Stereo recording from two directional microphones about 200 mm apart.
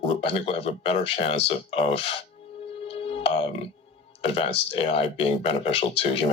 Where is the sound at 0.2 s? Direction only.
30° left (ahead or behind).